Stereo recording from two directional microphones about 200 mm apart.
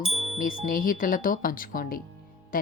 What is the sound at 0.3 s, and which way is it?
Speech, 45° left (ahead or behind).